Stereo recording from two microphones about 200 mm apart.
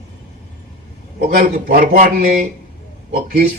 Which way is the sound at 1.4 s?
45° right (ahead or behind).